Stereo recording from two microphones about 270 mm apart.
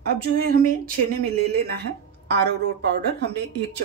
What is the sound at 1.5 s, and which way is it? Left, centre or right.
Speech, right.